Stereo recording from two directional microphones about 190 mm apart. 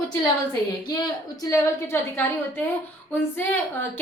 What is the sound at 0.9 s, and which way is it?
A woman's voice, 20° left (ahead or behind).